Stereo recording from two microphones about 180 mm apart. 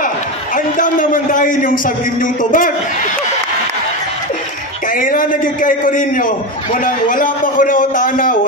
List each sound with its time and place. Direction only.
0.6 s a man's voice: 50° left (ahead or behind)
4.8 s a man's voice: 50° left (ahead or behind)